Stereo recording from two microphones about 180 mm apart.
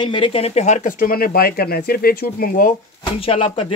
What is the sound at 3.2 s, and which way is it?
Speech, 30° left (ahead or behind).